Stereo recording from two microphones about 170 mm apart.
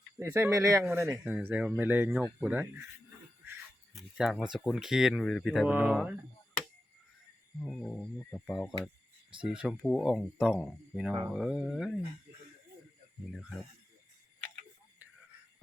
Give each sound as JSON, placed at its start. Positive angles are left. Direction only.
{"t": 0.2, "sound": "speech", "side_deg": -15}
{"t": 3.9, "sound": "a sound", "side_deg": 0}
{"t": 4.5, "sound": "speech", "side_deg": 0}
{"t": 7.6, "sound": "speech", "side_deg": 5}